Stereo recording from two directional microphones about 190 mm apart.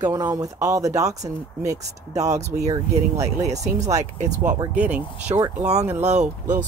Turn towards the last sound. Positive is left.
turn(degrees=-40)  # may be behind; listen again after turning